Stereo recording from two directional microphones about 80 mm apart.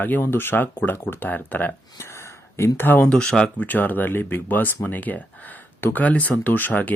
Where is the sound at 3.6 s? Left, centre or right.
Left.